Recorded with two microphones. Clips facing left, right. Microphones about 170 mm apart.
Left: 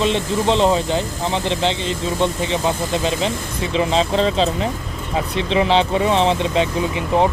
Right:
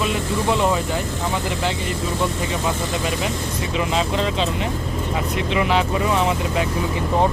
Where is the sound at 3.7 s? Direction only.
30° left (ahead or behind).